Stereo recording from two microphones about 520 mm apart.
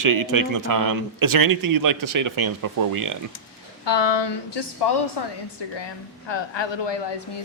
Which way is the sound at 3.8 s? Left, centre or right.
Left.